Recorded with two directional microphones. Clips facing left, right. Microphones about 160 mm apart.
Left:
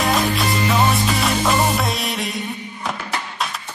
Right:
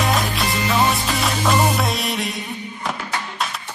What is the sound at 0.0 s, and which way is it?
Music, centre (ahead or behind).